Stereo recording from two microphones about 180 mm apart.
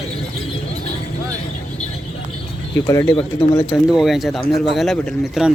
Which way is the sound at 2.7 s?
15° left (ahead or behind).